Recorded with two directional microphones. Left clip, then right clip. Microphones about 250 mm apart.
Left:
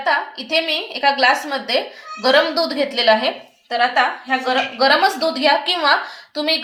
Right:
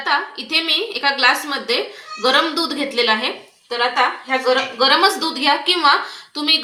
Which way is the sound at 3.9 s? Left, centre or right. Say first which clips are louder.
Even; left.